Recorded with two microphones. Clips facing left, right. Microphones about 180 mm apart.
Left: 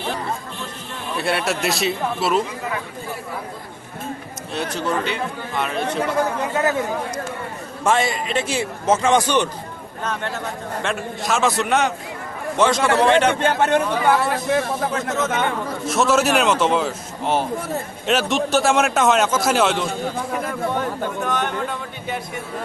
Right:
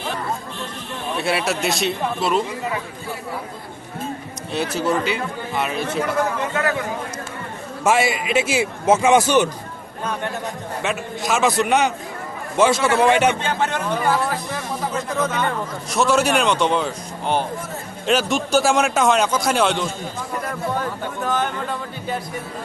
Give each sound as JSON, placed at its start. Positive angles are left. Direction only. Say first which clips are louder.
{"t": 1.1, "sound": "speech", "louder": "even", "side_deg": 0}
{"t": 4.5, "sound": "speech", "louder": "right 2 dB", "side_deg": -5}
{"t": 6.6, "sound": "a man's voice", "louder": "left 3 dB", "side_deg": 20}
{"t": 7.9, "sound": "a man's voice", "louder": "right 1 dB", "side_deg": -10}
{"t": 10.8, "sound": "a man's voice", "louder": "right 1 dB", "side_deg": 0}
{"t": 13.4, "sound": "speech", "louder": "left 5 dB", "side_deg": 60}
{"t": 15.9, "sound": "speech", "louder": "even", "side_deg": 0}
{"t": 21.2, "sound": "speech", "louder": "right 3 dB", "side_deg": 0}